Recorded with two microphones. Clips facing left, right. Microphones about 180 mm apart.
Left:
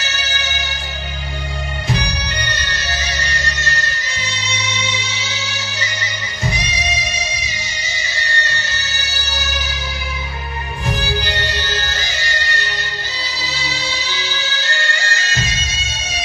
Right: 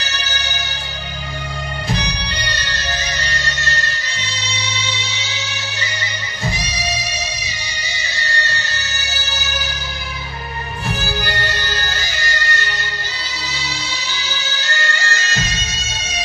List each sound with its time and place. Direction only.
6.5 s music: 35° right (ahead or behind)
11.7 s music: centre (ahead or behind)
14.2 s music: centre (ahead or behind)